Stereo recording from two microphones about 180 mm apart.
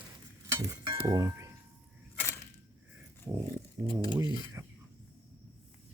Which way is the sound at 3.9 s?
25° left (ahead or behind).